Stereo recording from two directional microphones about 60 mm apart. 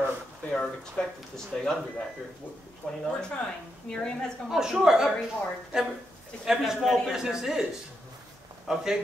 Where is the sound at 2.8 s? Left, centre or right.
Centre.